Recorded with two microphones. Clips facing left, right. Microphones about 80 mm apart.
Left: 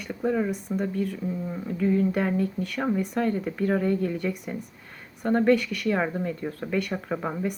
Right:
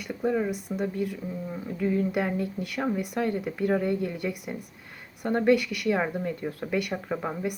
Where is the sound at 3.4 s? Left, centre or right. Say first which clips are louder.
Left 1 dB; centre.